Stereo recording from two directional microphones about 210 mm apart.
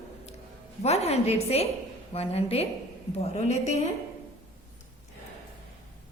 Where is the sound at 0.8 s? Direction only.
30° left (ahead or behind).